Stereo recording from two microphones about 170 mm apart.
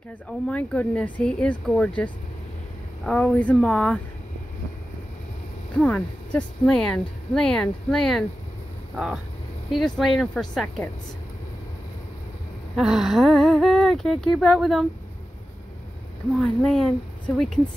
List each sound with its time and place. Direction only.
0.3 s speech: 5° left (ahead or behind)
3.1 s speech: 5° left (ahead or behind)
5.8 s speech: 5° left (ahead or behind)
12.7 s speech: centre (ahead or behind)
16.3 s speech: 5° left (ahead or behind)